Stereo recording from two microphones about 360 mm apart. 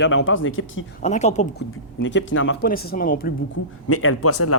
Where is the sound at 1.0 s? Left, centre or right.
Centre.